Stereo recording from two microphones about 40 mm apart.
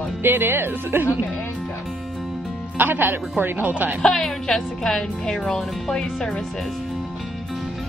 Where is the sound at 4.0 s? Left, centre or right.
Centre.